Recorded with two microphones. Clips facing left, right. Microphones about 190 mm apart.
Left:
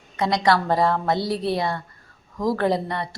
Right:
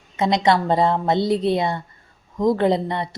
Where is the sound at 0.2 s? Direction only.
20° right (ahead or behind).